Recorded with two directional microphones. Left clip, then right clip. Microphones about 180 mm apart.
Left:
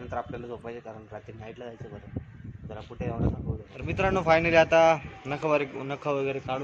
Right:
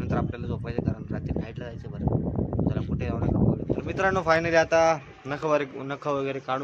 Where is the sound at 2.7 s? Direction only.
20° right (ahead or behind).